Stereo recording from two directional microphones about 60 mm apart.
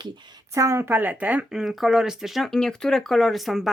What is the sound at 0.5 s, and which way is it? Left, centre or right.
Speech, right.